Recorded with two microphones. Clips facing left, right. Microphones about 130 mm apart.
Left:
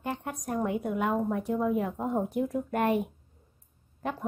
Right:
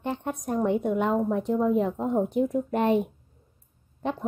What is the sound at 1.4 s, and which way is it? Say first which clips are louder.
A woman's voice: right 4 dB; 25° right (ahead or behind).